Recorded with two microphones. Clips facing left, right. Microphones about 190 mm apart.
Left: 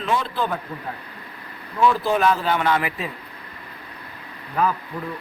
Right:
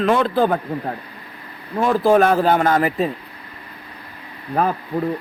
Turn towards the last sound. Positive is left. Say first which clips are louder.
# right 3 dB
turn(degrees=-45)  # may be behind; listen again after turning